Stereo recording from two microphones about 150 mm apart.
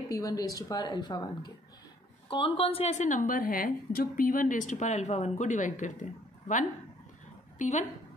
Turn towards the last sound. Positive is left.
turn(degrees=55)  # may be behind; listen again after turning